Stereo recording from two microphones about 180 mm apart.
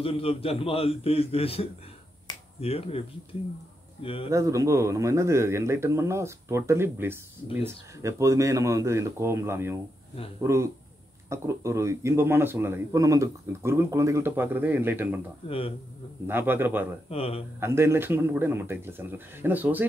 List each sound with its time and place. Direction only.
0.0 s a man's voice: 30° left (ahead or behind)
4.3 s speech: 15° right (ahead or behind)
15.4 s a man's voice: 30° left (ahead or behind)
16.3 s speech: 10° right (ahead or behind)
17.1 s a man's voice: 35° left (ahead or behind)
17.6 s speech: 15° right (ahead or behind)